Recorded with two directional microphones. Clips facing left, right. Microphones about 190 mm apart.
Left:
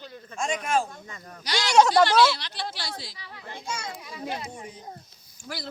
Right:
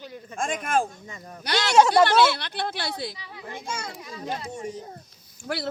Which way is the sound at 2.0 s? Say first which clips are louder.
Right 1 dB; 55° right (ahead or behind).